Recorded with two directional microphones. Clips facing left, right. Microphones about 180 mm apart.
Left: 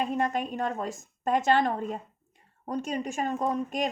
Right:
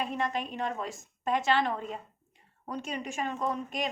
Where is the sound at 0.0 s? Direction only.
45° left (ahead or behind).